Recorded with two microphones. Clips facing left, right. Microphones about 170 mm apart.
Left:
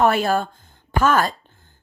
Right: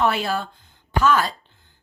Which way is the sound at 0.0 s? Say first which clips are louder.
Left 4 dB; 50° left (ahead or behind).